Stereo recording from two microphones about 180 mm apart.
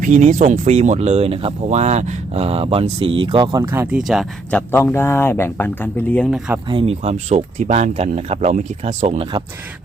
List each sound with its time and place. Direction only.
0.0 s speech: 40° right (ahead or behind); by 4.6 s centre (ahead or behind)
4.7 s speech: 10° left (ahead or behind)
6.7 s speech: 30° right (ahead or behind)